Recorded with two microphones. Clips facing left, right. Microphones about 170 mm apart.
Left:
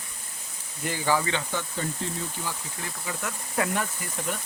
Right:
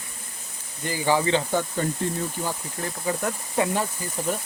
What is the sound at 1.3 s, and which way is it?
Speech, 45° right (ahead or behind).